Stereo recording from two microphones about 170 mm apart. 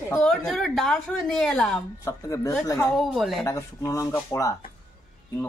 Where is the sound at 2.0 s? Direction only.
20° left (ahead or behind).